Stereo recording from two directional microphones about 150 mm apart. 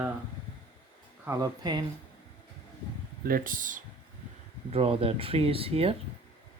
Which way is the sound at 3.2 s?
70° right (ahead or behind).